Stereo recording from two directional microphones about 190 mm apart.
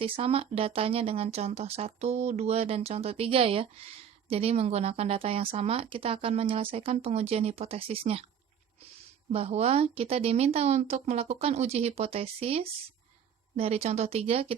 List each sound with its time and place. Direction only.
0.0 s speech: 30° right (ahead or behind)
9.3 s speech: 30° right (ahead or behind)